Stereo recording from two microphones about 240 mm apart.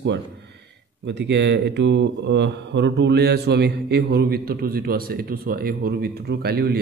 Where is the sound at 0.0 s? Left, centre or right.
Right.